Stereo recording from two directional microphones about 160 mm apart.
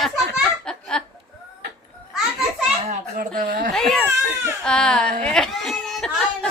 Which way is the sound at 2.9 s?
65° right (ahead or behind).